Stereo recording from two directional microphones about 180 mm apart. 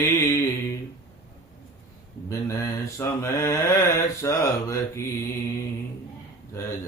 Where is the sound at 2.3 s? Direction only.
15° left (ahead or behind).